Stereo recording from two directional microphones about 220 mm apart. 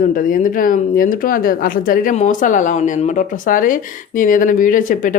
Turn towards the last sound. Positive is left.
turn(degrees=35)  # may be behind; listen again after turning